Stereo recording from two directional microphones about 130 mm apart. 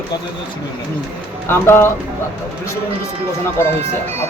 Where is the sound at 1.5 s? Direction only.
20° left (ahead or behind).